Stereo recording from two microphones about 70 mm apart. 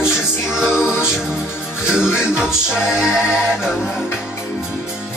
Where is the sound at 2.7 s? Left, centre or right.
Centre.